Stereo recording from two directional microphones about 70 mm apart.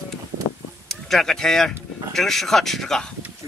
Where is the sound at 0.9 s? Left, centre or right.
Centre.